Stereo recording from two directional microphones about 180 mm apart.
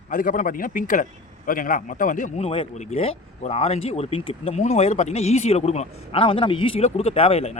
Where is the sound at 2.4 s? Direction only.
30° left (ahead or behind).